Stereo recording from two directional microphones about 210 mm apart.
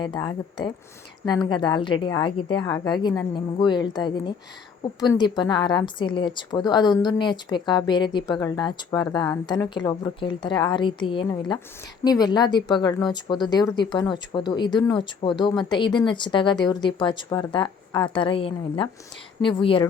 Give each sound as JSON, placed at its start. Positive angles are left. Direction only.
{"t": 0.0, "sound": "speech", "side_deg": 20}